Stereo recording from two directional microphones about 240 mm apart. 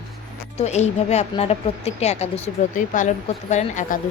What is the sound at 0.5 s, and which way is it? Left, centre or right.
A woman's voice, left.